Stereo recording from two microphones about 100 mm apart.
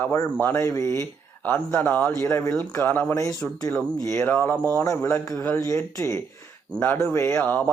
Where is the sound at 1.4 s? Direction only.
20° left (ahead or behind).